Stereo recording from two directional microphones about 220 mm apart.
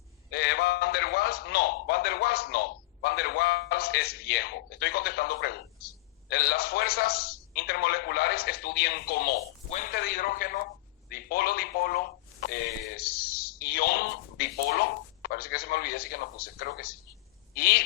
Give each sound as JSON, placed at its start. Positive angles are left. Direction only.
{"t": 0.3, "sound": "a man's voice", "side_deg": 45}
{"t": 9.6, "sound": "a man's voice", "side_deg": 35}